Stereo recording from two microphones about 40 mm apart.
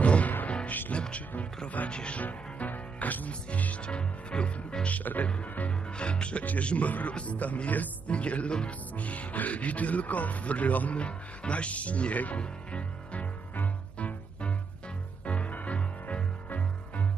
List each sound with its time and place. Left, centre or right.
0.0 s music: left
0.7 s music: left
0.9 s music: left
1.9 s speech: left
2.2 s speech: left
3.3 s speech: left
3.8 s speech: left
4.9 s speech: left
5.3 s speech: left
11.0 s speech: left
13.9 s music: left